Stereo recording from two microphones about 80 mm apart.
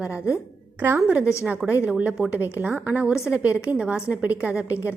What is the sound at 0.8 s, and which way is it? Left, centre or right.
Speech, right.